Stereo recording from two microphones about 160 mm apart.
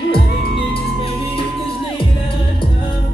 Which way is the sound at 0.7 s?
35° left (ahead or behind).